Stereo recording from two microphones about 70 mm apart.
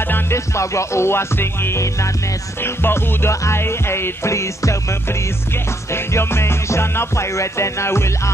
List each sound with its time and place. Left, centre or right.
0.1 s music: left
6.1 s music: left